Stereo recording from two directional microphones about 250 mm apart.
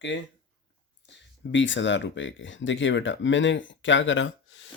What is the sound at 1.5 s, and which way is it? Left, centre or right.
Speech, left.